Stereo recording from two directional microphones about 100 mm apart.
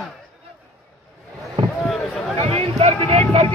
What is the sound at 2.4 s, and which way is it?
Speech, 85° right.